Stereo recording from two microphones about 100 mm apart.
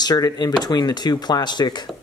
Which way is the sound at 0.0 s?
40° left (ahead or behind).